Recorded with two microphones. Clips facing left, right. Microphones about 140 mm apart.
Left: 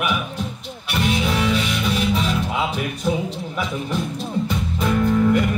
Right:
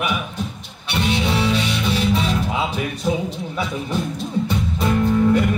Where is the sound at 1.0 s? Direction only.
30° right (ahead or behind).